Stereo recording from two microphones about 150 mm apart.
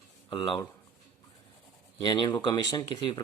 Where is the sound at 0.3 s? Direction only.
35° left (ahead or behind).